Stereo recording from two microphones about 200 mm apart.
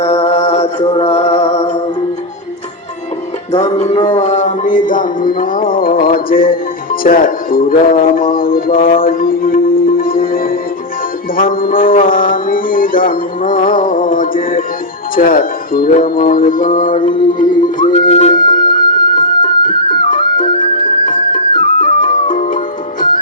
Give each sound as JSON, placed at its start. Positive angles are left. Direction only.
{"t": 0.0, "sound": "music", "side_deg": 30}
{"t": 3.5, "sound": "music", "side_deg": 35}
{"t": 4.2, "sound": "a sound", "side_deg": 35}
{"t": 9.0, "sound": "music", "side_deg": 45}
{"t": 15.1, "sound": "a sound", "side_deg": 45}
{"t": 17.2, "sound": "music", "side_deg": 45}
{"t": 18.0, "sound": "music", "side_deg": 30}